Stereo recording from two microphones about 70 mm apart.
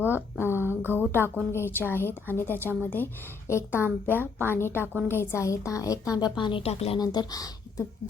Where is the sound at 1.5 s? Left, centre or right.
Left.